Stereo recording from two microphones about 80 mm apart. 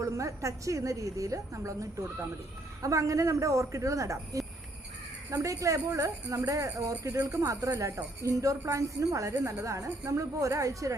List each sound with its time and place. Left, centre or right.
0.0 s speech: right